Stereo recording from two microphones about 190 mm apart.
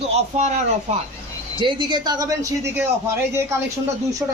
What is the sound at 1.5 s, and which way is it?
Speech, 25° right (ahead or behind).